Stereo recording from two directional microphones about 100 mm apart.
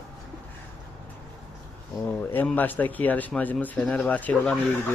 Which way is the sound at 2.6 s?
15° left (ahead or behind).